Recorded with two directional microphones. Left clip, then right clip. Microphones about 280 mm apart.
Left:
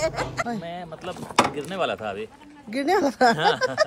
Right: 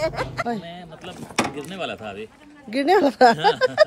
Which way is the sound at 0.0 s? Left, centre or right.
Centre.